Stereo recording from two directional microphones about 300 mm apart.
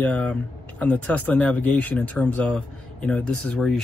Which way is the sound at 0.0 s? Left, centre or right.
Centre.